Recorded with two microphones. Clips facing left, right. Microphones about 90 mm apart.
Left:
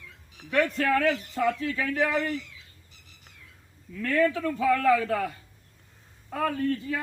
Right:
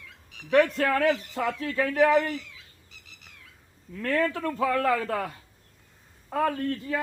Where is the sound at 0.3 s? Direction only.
50° right (ahead or behind).